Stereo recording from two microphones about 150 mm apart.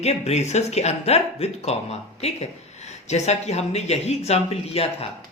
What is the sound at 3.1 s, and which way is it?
Speech, 45° left (ahead or behind).